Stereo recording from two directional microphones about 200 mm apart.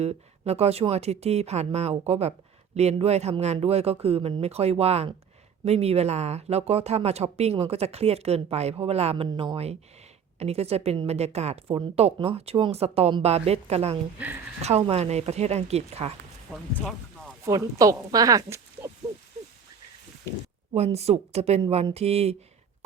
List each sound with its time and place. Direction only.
0.0 s speech: 30° right (ahead or behind)
16.5 s speech: centre (ahead or behind)
17.4 s speech: 15° right (ahead or behind)
20.7 s speech: 30° right (ahead or behind)